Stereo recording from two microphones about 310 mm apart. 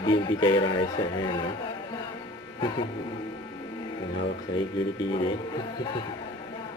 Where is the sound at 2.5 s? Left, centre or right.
Centre.